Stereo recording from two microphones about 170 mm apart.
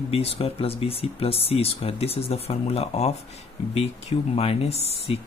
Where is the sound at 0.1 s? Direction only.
35° left (ahead or behind).